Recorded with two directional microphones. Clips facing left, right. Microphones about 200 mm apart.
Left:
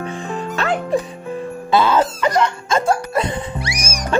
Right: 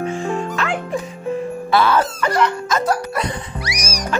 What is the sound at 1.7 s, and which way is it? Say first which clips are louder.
Speech: left 1 dB; 15° left (ahead or behind).